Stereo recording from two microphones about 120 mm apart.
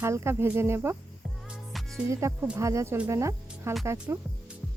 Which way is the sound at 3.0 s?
25° right (ahead or behind).